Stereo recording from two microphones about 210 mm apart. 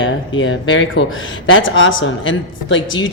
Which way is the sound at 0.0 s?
65° left (ahead or behind).